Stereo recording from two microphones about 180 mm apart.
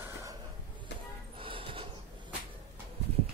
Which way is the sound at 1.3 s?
30° right (ahead or behind).